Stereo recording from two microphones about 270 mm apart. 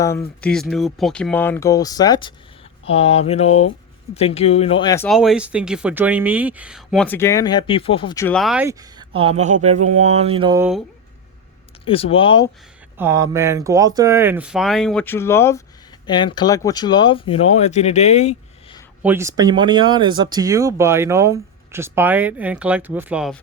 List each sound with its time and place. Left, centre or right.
0.0 s speech: centre
5.0 s speech: centre
11.9 s speech: left
13.0 s speech: centre; by 18.8 s left
19.0 s speech: centre